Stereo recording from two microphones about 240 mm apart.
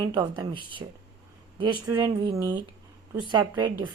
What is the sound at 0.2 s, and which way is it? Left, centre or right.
Speech, centre.